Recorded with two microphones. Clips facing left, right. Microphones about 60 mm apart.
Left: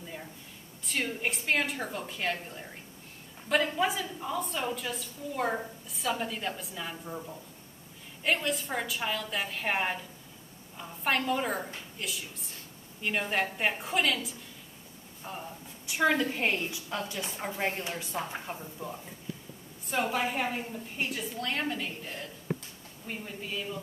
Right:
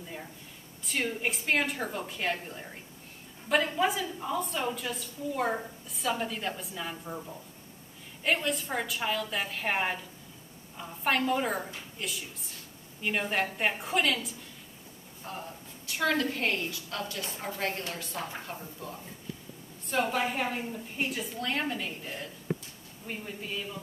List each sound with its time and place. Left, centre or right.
0.8 s a woman's voice: centre
15.9 s a woman's voice: centre
19.9 s a woman's voice: centre